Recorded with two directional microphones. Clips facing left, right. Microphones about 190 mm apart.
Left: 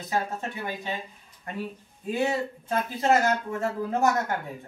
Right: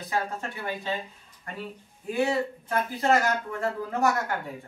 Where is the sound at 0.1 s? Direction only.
20° left (ahead or behind).